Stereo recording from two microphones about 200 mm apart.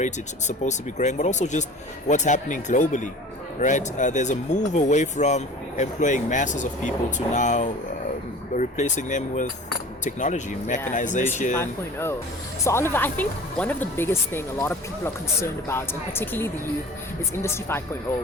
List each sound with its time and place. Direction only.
0.0 s speech: 35° left (ahead or behind)
11.5 s speech: 10° left (ahead or behind)